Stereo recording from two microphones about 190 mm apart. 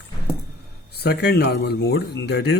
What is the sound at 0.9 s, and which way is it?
Speech, 60° left (ahead or behind).